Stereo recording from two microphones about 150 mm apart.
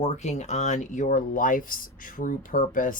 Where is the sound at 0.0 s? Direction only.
50° left (ahead or behind).